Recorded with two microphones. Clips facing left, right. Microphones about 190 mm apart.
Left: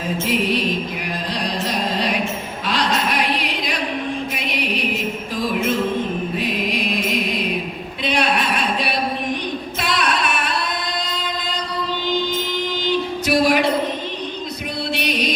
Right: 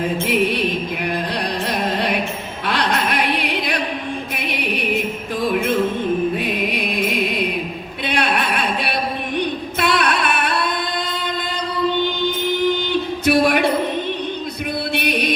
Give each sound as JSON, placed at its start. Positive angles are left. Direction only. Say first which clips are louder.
{"t": 0.3, "sound": "music", "louder": "even", "side_deg": -60}
{"t": 6.4, "sound": "mantra", "louder": "right 1 dB", "side_deg": -55}
{"t": 8.0, "sound": "a sound", "louder": "even", "side_deg": -60}
{"t": 9.8, "sound": "music", "louder": "right 3 dB", "side_deg": -60}
{"t": 12.6, "sound": "a sound", "louder": "right 3 dB", "side_deg": -60}
{"t": 14.9, "sound": "music", "louder": "right 2 dB", "side_deg": -55}